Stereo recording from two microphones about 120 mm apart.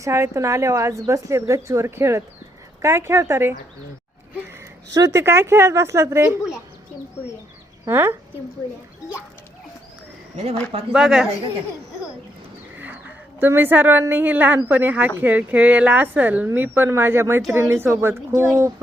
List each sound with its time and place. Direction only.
0.0 s a woman's voice: 25° right (ahead or behind)
4.9 s a woman's voice: 30° right (ahead or behind)
6.2 s speech: 5° right (ahead or behind)
7.9 s a woman's voice: 20° right (ahead or behind)
10.7 s a woman's voice: 55° right (ahead or behind)
10.9 s speech: 5° right (ahead or behind)
12.8 s a sound: 15° right (ahead or behind)
14.1 s a woman's voice: 15° right (ahead or behind)